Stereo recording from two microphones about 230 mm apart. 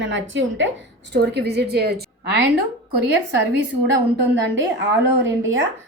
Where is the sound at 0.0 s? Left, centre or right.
Right.